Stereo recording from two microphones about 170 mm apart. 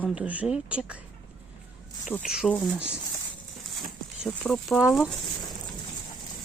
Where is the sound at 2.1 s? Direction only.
10° left (ahead or behind).